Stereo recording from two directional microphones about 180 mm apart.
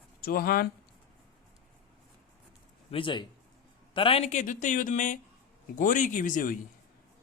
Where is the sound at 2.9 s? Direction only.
30° left (ahead or behind); by 6.5 s 45° left (ahead or behind).